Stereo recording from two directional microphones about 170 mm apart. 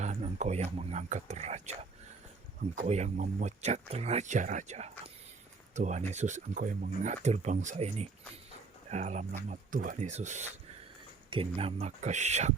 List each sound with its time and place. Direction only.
0.0 s speech: 40° right (ahead or behind)